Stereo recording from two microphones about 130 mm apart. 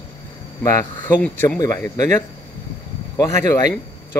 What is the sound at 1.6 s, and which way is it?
Speech, 25° left (ahead or behind).